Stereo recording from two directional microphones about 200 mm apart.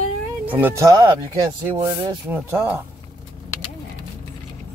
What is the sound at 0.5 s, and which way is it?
Speech, 10° right (ahead or behind).